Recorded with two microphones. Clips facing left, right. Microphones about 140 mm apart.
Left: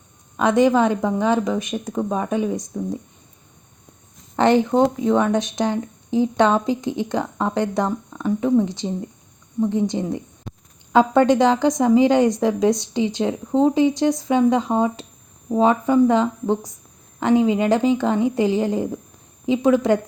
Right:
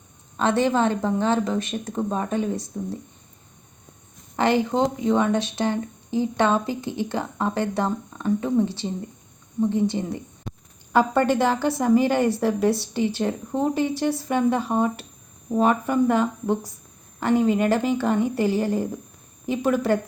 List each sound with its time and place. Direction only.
0.3 s a woman's voice: 15° left (ahead or behind)
4.4 s a woman's voice: 20° left (ahead or behind)